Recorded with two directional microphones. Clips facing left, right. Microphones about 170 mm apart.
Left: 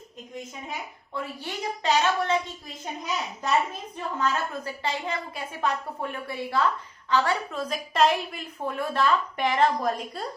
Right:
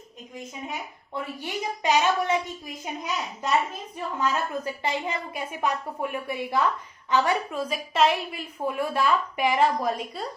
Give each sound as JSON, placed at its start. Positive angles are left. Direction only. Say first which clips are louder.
{"t": 1.1, "sound": "a woman's voice", "louder": "right 2 dB", "side_deg": -15}
{"t": 4.2, "sound": "a woman's voice", "louder": "right 1 dB", "side_deg": -15}